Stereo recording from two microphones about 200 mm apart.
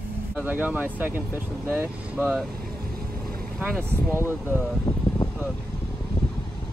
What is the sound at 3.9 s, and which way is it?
Speech, 10° left (ahead or behind).